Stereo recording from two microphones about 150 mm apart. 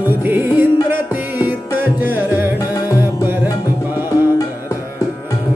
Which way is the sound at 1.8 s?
15° right (ahead or behind).